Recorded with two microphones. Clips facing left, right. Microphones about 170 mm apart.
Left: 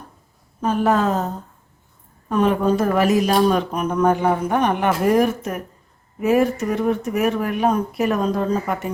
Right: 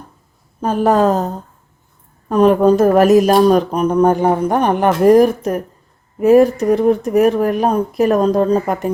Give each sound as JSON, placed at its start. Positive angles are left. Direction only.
{"t": 0.6, "sound": "speech", "side_deg": -35}
{"t": 2.3, "sound": "speech", "side_deg": -40}